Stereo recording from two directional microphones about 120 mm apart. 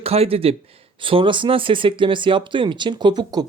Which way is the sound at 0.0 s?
55° right (ahead or behind).